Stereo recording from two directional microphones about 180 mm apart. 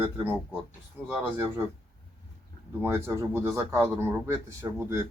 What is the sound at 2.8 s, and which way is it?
A man's voice, 15° right (ahead or behind).